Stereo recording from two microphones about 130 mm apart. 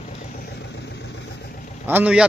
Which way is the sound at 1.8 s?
10° right (ahead or behind).